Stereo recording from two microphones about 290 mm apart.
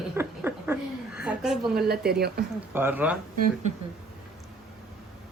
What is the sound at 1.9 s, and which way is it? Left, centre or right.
Speech, right.